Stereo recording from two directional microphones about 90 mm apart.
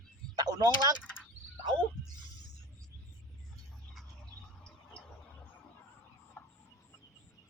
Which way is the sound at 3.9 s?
Centre (ahead or behind).